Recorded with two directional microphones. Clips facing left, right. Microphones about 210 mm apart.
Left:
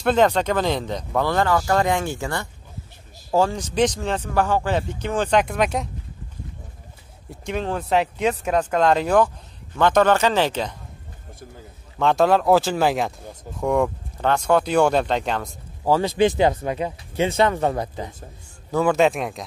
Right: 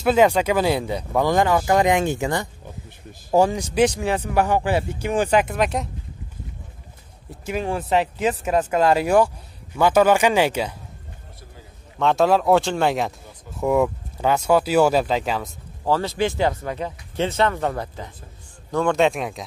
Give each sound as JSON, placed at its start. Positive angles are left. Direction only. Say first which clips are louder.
{"t": 0.0, "sound": "speech", "louder": "right 1 dB", "side_deg": -10}
{"t": 7.2, "sound": "speech", "louder": "right 1 dB", "side_deg": -5}
{"t": 12.0, "sound": "speech", "louder": "even", "side_deg": 0}
{"t": 15.8, "sound": "speech", "louder": "left 3 dB", "side_deg": 15}
{"t": 18.7, "sound": "speech", "louder": "left 1 dB", "side_deg": 5}